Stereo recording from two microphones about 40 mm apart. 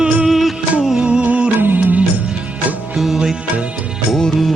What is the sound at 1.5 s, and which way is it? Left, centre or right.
Music, right.